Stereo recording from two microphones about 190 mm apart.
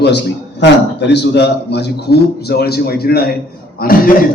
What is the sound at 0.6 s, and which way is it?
A man's voice, 65° left (ahead or behind).